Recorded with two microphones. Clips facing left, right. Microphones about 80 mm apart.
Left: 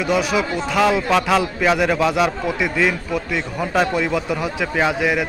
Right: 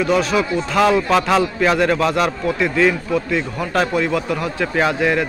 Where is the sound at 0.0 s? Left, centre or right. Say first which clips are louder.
Right 2 dB; centre.